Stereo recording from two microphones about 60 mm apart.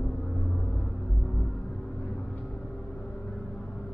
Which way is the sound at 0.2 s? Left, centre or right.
Centre.